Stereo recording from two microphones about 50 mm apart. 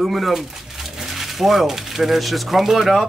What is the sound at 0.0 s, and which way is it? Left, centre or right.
Speech, centre.